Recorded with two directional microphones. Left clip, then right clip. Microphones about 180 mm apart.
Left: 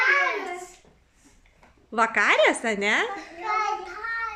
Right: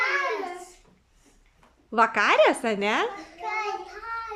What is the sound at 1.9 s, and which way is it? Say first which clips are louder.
A woman's voice: right 1 dB; 10° right (ahead or behind).